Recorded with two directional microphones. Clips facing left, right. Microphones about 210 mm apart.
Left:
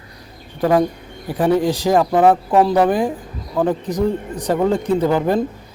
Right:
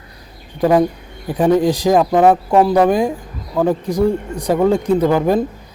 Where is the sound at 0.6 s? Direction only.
15° right (ahead or behind).